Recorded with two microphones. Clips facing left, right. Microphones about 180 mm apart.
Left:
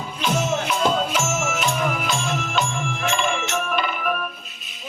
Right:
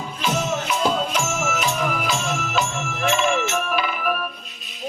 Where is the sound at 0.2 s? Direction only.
5° right (ahead or behind).